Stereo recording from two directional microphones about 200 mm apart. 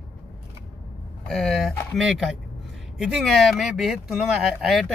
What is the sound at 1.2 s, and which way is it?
Speech, centre (ahead or behind).